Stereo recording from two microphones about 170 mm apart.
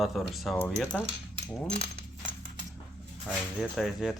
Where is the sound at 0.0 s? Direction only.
Centre (ahead or behind).